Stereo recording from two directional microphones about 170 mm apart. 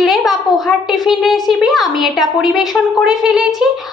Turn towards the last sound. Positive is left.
turn(degrees=-5)  # may be behind; listen again after turning